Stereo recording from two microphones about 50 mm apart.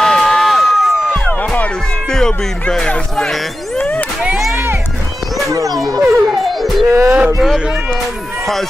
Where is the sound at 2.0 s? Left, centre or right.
Centre.